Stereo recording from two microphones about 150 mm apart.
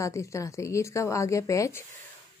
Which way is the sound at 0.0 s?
20° left (ahead or behind).